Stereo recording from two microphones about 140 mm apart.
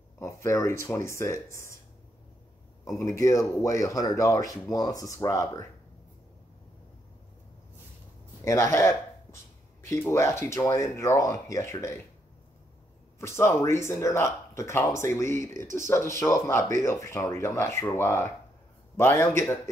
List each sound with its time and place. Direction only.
0.2 s speech: 20° left (ahead or behind)
2.8 s speech: 25° left (ahead or behind)
8.5 s speech: 20° left (ahead or behind)
13.2 s a man's voice: 20° left (ahead or behind)